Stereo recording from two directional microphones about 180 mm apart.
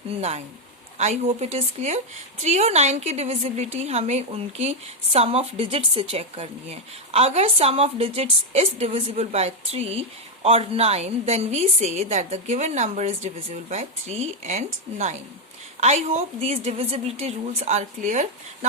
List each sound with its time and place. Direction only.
0.2 s a woman's voice: 35° right (ahead or behind)